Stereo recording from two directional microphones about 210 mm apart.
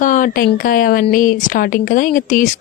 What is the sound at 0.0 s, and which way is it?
Speech, 40° left (ahead or behind).